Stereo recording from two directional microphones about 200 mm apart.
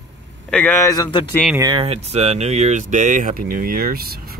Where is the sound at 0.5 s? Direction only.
5° left (ahead or behind).